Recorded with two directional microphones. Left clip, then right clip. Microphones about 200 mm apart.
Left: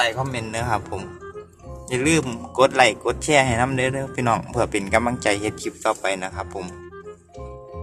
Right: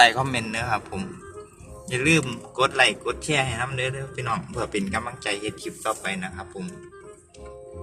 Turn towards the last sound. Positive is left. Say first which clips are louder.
# left 6 dB
turn(degrees=30)  # may be behind; listen again after turning